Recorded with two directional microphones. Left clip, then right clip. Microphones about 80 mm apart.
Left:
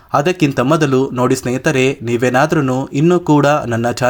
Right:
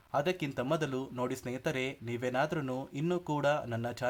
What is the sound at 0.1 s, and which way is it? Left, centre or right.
Speech, left.